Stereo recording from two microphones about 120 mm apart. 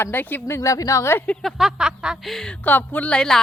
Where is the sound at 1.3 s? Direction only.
5° left (ahead or behind).